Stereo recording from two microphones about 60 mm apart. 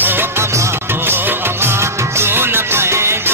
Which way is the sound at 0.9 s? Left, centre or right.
Right.